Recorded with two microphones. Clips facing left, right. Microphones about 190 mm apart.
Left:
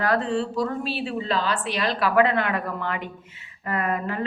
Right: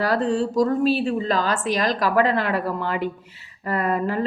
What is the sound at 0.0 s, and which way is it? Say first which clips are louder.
Speech: right 2 dB; 35° right (ahead or behind).